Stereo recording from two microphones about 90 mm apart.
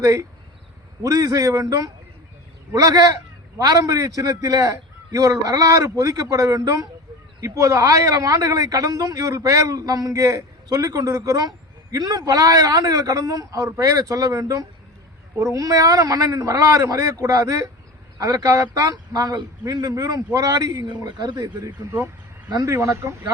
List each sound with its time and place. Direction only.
0.0 s a man's voice: 35° right (ahead or behind)
21.8 s speech: 30° right (ahead or behind)
22.4 s speech: 40° right (ahead or behind)